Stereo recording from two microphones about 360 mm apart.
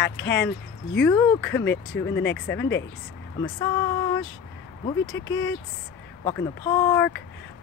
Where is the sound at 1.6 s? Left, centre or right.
Left.